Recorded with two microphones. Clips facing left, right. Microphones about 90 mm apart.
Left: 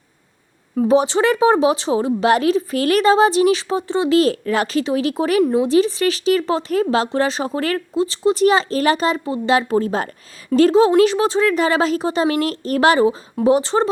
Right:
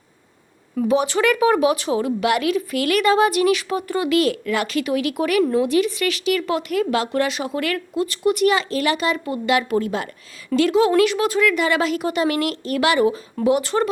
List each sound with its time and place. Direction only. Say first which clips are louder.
0.8 s a woman's voice: left 3 dB; 35° left (ahead or behind)